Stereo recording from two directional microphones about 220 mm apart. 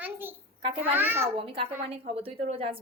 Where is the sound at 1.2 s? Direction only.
25° right (ahead or behind).